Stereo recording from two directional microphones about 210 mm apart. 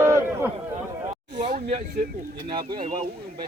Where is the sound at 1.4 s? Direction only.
50° right (ahead or behind).